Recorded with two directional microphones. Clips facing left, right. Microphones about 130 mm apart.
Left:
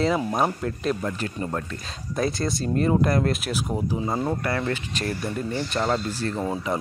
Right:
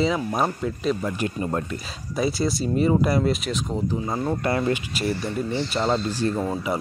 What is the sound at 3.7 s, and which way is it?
Speech, 10° left (ahead or behind).